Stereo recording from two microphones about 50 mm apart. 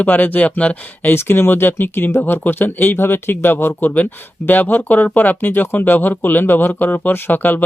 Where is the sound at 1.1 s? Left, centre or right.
Left.